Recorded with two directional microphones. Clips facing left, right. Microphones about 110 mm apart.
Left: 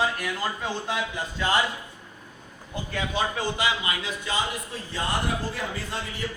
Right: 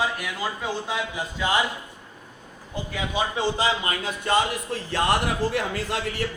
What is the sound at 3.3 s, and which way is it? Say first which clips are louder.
Speech: right 3 dB; 35° right (ahead or behind).